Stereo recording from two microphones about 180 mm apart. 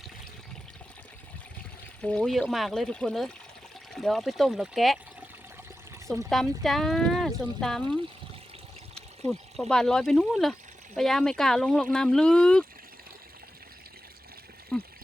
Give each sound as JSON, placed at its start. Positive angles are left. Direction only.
{"t": 2.0, "sound": "speech", "side_deg": 5}
{"t": 6.3, "sound": "speech", "side_deg": 0}
{"t": 9.2, "sound": "speech", "side_deg": 5}
{"t": 14.7, "sound": "speech", "side_deg": 5}